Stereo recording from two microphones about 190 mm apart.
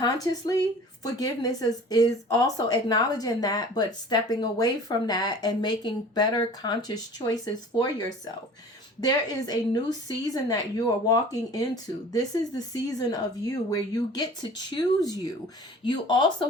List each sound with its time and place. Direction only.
0.0 s speech: 20° left (ahead or behind)